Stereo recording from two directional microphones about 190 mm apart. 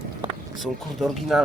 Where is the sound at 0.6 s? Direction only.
Centre (ahead or behind).